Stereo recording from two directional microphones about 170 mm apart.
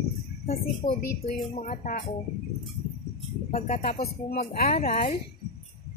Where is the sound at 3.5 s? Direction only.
50° left (ahead or behind).